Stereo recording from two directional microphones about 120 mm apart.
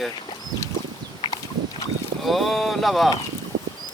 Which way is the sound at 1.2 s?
40° left (ahead or behind).